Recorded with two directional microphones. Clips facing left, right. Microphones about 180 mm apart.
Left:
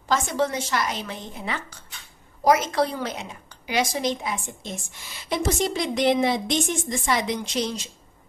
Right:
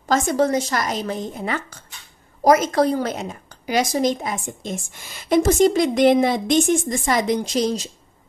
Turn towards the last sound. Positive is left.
turn(degrees=-40)  # may be behind; listen again after turning